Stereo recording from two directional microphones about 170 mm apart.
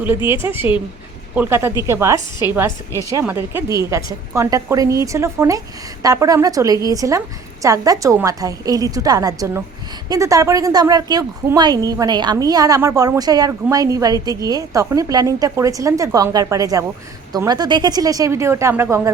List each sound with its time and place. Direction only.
0.3 s a woman's voice: 15° right (ahead or behind)